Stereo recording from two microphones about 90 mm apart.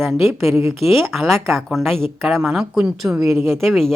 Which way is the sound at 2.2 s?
5° right (ahead or behind).